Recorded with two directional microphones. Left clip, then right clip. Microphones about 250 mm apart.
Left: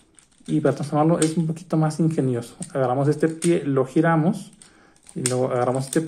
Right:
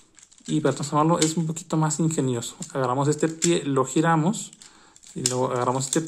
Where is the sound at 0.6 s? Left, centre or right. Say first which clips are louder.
Left 2 dB; centre.